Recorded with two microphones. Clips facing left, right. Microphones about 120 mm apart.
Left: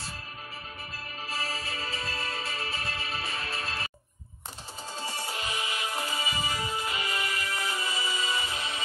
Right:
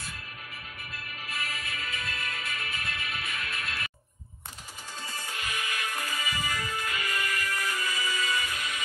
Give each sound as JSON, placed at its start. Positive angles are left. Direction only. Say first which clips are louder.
{"t": 0.9, "sound": "music", "louder": "left 2 dB", "side_deg": 30}
{"t": 5.0, "sound": "music", "louder": "left 3 dB", "side_deg": 30}